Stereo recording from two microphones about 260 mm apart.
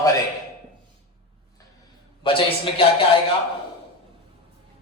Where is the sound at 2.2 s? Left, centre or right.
Centre.